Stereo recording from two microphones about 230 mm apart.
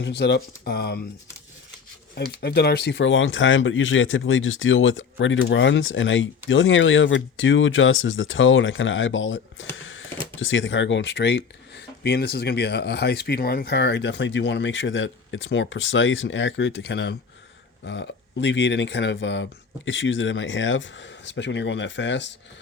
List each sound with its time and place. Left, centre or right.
0.0 s speech: left
2.1 s speech: left
9.7 s a sound: left
10.4 s speech: left